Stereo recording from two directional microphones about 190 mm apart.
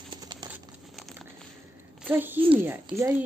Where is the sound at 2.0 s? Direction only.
10° right (ahead or behind).